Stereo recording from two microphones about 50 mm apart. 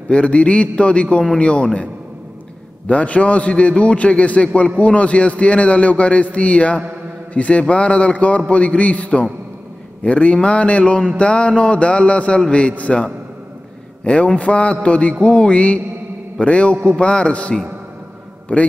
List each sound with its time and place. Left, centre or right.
0.1 s a man's voice: left
1.1 s a man's voice: centre
2.9 s a man's voice: left
14.0 s a man's voice: left